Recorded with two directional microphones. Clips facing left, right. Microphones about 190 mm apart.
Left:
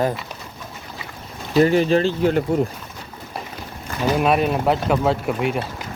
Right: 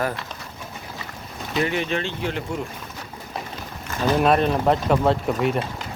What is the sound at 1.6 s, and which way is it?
Speech, 35° left (ahead or behind).